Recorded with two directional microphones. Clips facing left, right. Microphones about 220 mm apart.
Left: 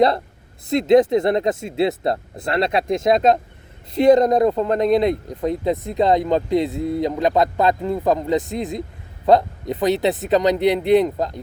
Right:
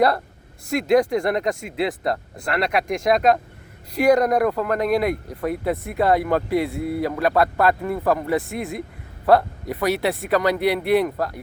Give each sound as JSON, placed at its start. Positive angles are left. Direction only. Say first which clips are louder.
{"t": 0.7, "sound": "speech", "louder": "left 4 dB", "side_deg": 20}